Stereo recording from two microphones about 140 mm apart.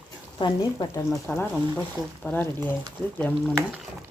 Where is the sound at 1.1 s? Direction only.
10° left (ahead or behind).